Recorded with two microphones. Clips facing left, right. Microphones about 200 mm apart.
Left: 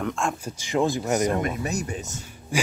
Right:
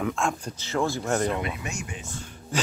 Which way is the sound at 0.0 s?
Centre (ahead or behind).